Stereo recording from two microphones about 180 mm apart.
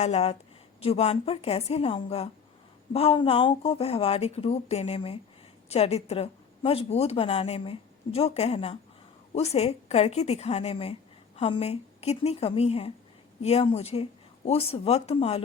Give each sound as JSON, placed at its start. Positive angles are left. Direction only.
{"t": 0.0, "sound": "a woman's voice", "side_deg": 35}